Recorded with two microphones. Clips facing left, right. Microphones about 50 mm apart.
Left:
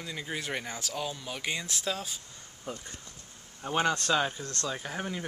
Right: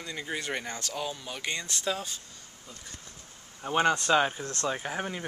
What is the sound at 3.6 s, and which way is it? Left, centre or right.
Speech, centre.